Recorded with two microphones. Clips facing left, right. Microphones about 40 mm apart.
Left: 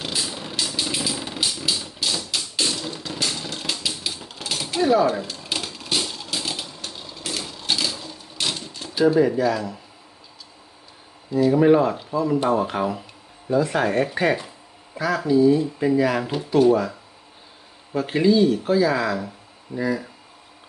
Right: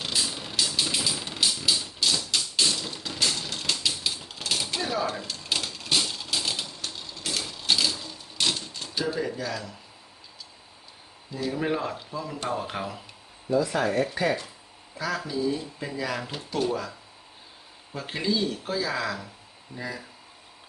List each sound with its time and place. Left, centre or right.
0.0 s vehicle: centre
0.8 s a sound: centre
9.1 s speech: centre
11.3 s speech: centre
13.5 s speech: left
14.9 s speech: centre
17.9 s speech: centre